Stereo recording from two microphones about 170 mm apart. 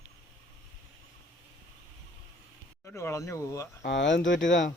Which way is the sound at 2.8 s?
15° left (ahead or behind).